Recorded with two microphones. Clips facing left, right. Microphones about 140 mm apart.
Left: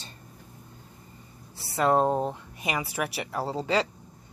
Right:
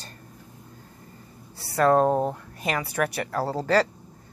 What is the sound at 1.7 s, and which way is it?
Speech, 15° left (ahead or behind).